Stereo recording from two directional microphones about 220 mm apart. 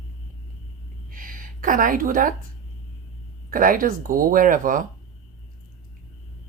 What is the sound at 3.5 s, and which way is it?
Speech, 40° right (ahead or behind).